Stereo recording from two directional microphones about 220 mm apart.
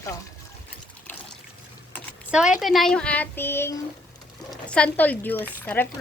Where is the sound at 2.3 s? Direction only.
5° right (ahead or behind).